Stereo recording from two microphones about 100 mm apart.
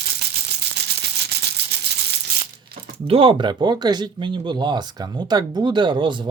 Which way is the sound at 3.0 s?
65° right (ahead or behind).